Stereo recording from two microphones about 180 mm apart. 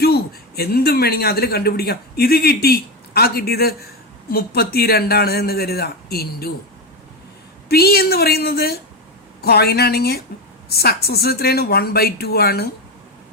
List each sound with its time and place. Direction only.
0.0 s speech: 60° left (ahead or behind)
7.7 s speech: 60° left (ahead or behind)